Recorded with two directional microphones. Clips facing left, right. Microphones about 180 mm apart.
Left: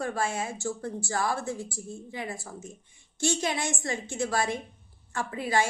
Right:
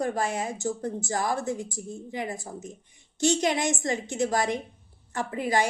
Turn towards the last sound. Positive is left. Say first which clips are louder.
# right 2 dB
turn(degrees=-15)  # may be behind; listen again after turning